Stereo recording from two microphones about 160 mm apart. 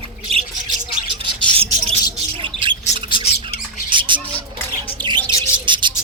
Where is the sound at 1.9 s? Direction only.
35° right (ahead or behind).